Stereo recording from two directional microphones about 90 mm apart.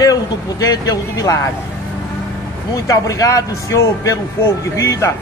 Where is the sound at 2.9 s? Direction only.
40° left (ahead or behind).